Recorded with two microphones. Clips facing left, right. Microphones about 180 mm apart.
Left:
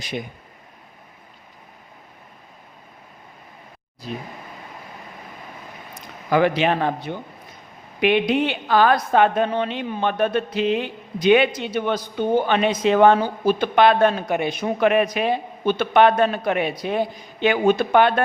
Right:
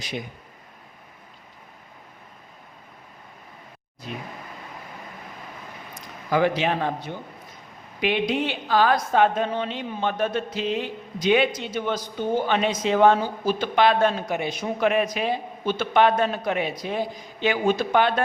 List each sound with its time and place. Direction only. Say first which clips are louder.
6.3 s a woman's voice: left 3 dB; 65° left (ahead or behind)